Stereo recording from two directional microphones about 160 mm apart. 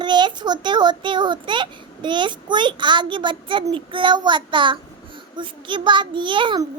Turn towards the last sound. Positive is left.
turn(degrees=-30)  # may be behind; listen again after turning